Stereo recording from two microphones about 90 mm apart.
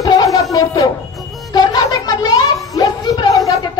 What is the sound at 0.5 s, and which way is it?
Speech, 40° left (ahead or behind).